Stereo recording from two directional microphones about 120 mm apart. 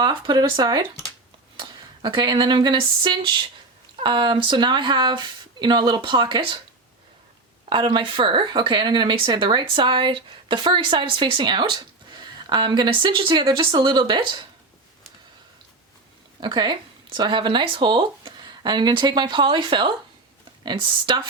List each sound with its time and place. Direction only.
0.0 s speech: 40° right (ahead or behind)
7.7 s speech: 45° right (ahead or behind)
16.4 s speech: 40° right (ahead or behind)